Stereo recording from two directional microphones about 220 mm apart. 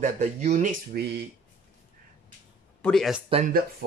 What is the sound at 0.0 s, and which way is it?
Speech, 30° right (ahead or behind).